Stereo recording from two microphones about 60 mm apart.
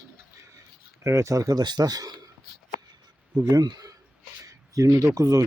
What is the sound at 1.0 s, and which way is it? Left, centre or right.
Speech, right.